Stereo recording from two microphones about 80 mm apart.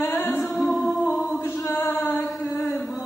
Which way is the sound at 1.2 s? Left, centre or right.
Left.